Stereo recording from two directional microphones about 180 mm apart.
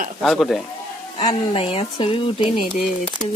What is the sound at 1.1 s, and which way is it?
Speech, 30° left (ahead or behind).